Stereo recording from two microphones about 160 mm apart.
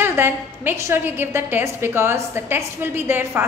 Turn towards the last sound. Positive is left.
turn(degrees=-15)  # may be behind; listen again after turning